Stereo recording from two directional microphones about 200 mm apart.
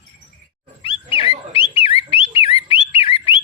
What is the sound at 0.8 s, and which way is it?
Wild animals, 25° left (ahead or behind).